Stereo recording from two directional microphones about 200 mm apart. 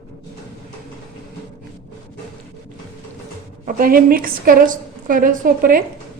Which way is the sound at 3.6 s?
45° right (ahead or behind).